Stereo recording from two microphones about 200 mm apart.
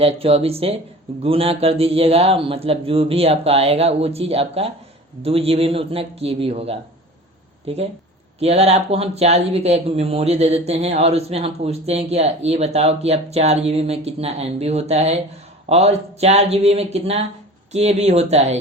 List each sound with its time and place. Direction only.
0.0 s a man's voice: 30° right (ahead or behind)
8.4 s speech: 30° right (ahead or behind)